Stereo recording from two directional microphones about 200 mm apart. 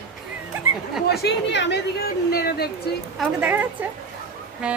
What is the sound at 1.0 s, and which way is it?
Speech, 55° left (ahead or behind).